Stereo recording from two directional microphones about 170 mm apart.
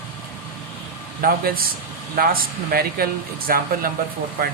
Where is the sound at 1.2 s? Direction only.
60° right (ahead or behind).